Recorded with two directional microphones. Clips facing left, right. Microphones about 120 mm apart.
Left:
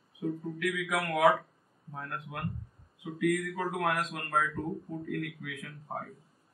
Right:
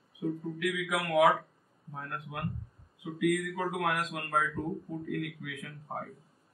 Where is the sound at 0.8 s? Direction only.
Centre (ahead or behind).